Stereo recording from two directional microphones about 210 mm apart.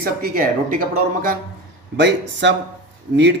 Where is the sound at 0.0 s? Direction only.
45° right (ahead or behind).